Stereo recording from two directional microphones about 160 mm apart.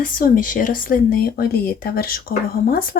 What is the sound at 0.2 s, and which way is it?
Speech, 60° left (ahead or behind).